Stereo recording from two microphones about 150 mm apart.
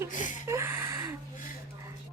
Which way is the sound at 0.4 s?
15° right (ahead or behind).